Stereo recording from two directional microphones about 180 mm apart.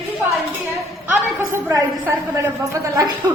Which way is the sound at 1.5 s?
20° right (ahead or behind).